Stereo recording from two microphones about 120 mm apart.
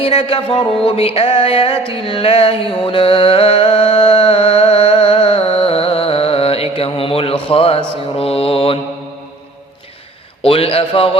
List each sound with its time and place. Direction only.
0.0 s music: 50° left (ahead or behind)
10.4 s music: 50° left (ahead or behind)